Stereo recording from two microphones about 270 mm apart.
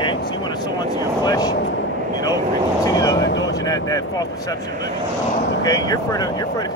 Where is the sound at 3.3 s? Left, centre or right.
Left.